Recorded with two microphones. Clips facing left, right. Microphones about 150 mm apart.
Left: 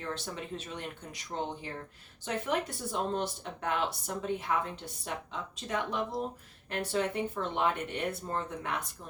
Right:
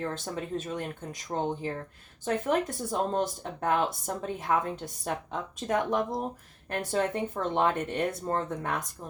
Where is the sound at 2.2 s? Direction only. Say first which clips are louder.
Right 5 dB; 45° right (ahead or behind).